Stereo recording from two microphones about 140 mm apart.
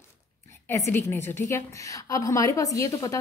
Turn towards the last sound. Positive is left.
turn(degrees=25)  # may be behind; listen again after turning